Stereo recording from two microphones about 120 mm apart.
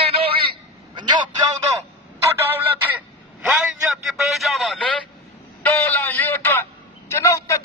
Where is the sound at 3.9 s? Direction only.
Centre (ahead or behind).